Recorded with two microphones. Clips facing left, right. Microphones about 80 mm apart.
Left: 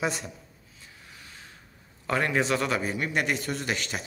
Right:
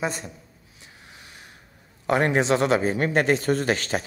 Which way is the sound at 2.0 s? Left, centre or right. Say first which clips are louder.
Right 5 dB; right.